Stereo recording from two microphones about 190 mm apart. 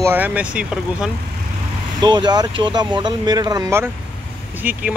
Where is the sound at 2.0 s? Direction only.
20° right (ahead or behind).